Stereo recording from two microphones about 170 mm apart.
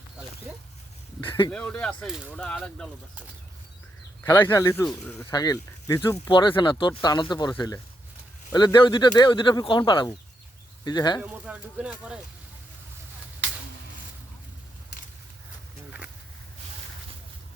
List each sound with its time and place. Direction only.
1.5 s speech: 10° left (ahead or behind)
4.3 s speech: 15° left (ahead or behind)
4.9 s speech: 5° left (ahead or behind)
5.2 s speech: 20° left (ahead or behind)
11.2 s speech: 5° right (ahead or behind)